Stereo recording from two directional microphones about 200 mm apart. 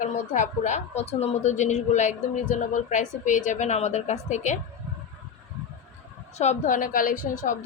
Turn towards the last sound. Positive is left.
turn(degrees=40)  # may be behind; listen again after turning